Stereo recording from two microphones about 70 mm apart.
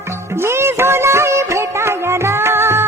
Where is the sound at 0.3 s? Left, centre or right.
Right.